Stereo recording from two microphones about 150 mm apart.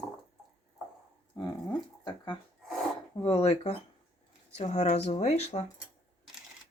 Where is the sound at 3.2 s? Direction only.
45° left (ahead or behind).